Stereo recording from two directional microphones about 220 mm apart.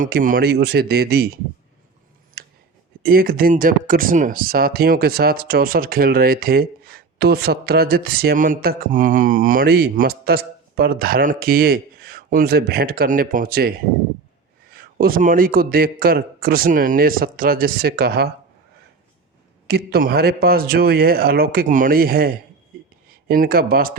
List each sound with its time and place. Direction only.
0.0 s speech: 40° right (ahead or behind)
2.4 s a sound: 45° right (ahead or behind)
3.0 s a man's voice: 40° right (ahead or behind)
19.6 s speech: 45° right (ahead or behind)
23.3 s speech: 40° right (ahead or behind)